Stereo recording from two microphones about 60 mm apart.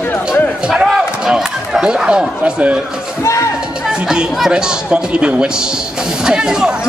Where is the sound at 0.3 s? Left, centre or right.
Centre.